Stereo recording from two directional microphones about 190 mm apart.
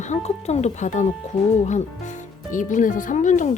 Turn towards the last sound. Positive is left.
turn(degrees=40)  # may be behind; listen again after turning